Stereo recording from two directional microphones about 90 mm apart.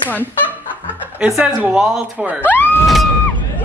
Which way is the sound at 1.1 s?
10° right (ahead or behind).